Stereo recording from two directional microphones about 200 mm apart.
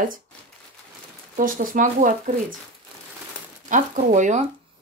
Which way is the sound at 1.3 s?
45° right (ahead or behind).